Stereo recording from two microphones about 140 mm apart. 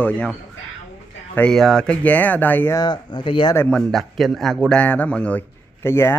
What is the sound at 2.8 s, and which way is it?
Speech, 35° left (ahead or behind).